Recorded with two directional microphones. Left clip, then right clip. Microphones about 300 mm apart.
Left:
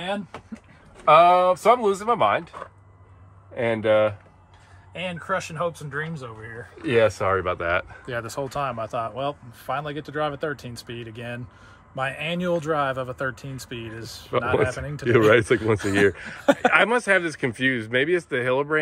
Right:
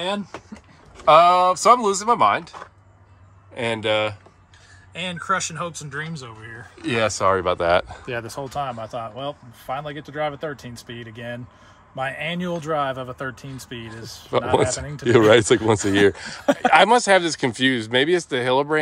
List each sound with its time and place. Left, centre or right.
1.0 s speech: centre
3.5 s speech: centre
4.9 s speech: centre
6.8 s speech: centre